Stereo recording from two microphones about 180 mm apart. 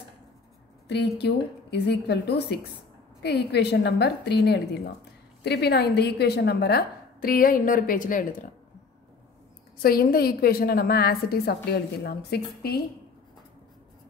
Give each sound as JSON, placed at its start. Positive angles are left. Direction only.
{"t": 0.8, "sound": "a woman's voice", "side_deg": 70}
{"t": 9.8, "sound": "a woman's voice", "side_deg": 55}